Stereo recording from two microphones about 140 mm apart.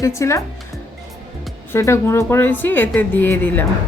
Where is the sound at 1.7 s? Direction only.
20° left (ahead or behind).